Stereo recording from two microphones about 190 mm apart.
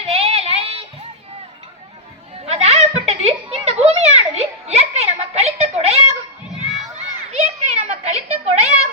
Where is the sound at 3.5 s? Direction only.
30° right (ahead or behind).